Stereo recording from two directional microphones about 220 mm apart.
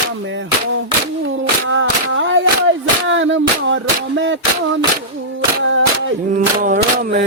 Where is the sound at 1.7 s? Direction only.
60° right (ahead or behind).